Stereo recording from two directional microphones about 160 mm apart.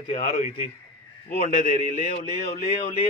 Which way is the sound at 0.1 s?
45° left (ahead or behind).